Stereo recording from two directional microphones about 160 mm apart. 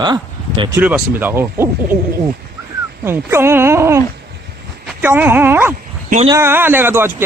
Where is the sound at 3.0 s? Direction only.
15° right (ahead or behind).